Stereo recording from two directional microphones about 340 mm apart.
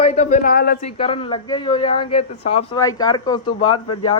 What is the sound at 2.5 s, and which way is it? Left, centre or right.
Speech, left.